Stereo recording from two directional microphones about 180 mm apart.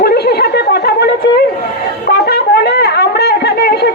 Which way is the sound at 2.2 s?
65° left (ahead or behind).